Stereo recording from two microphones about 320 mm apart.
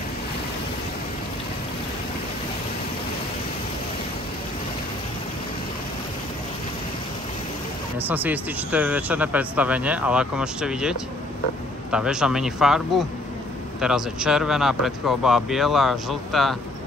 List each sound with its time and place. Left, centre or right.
8.1 s a man's voice: centre